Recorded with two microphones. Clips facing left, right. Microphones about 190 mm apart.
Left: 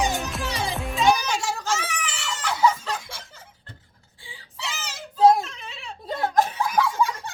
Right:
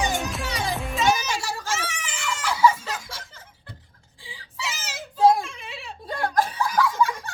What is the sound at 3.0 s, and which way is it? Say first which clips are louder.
Music: right 1 dB; 25° left (ahead or behind).